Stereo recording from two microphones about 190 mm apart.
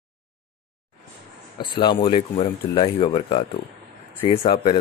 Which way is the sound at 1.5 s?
25° left (ahead or behind).